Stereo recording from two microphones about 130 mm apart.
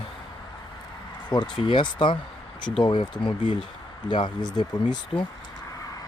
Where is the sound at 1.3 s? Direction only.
35° left (ahead or behind).